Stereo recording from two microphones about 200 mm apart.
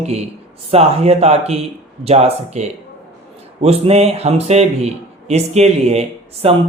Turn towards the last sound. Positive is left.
turn(degrees=-30)  # may be behind; listen again after turning